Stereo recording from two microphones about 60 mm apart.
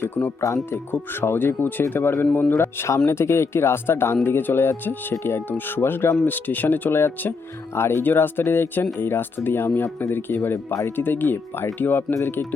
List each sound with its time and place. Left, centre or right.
0.0 s speech: left
0.4 s speech: left
1.2 s speech: left
3.1 s speech: left
6.2 s speech: left